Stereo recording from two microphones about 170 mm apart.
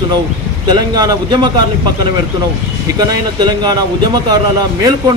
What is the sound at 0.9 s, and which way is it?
Speech, 20° right (ahead or behind).